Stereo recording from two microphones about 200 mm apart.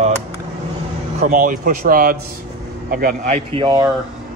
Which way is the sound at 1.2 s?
40° right (ahead or behind).